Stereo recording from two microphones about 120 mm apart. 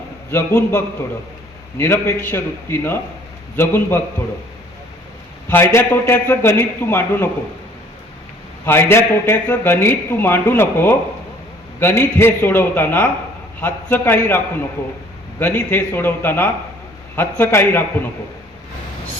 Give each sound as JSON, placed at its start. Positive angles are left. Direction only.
{"t": 0.3, "sound": "a man's voice", "side_deg": 25}
{"t": 1.8, "sound": "a man's voice", "side_deg": 20}
{"t": 5.5, "sound": "a man's voice", "side_deg": 20}
{"t": 8.6, "sound": "a man's voice", "side_deg": 20}